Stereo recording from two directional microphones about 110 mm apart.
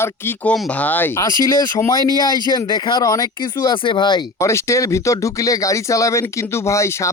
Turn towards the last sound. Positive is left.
turn(degrees=25)  # may be behind; listen again after turning